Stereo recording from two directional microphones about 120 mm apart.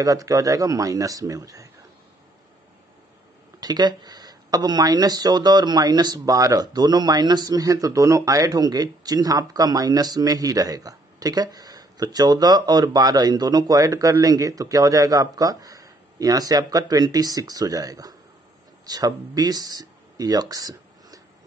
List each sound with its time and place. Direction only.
0.0 s speech: 30° right (ahead or behind)
3.6 s speech: 35° right (ahead or behind)